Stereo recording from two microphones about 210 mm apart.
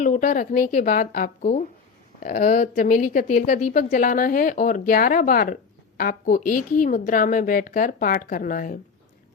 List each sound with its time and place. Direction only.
0.0 s speech: 40° left (ahead or behind)